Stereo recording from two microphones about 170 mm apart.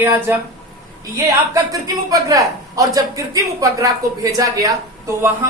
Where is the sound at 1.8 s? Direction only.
20° right (ahead or behind).